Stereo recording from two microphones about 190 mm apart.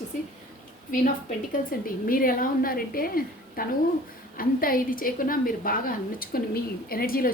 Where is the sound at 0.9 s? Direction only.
45° left (ahead or behind).